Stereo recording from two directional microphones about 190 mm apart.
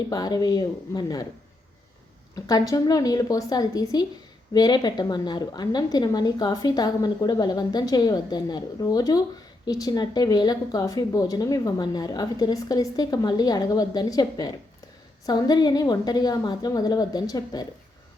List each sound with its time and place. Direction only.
0.1 s a woman's voice: 20° left (ahead or behind)
2.3 s a woman's voice: 20° left (ahead or behind)